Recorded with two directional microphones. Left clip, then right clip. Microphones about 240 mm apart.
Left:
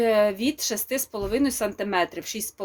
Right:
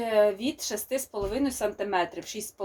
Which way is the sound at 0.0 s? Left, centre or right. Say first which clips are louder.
Left 3 dB; left.